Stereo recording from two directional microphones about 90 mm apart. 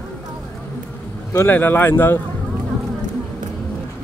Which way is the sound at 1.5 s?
20° left (ahead or behind).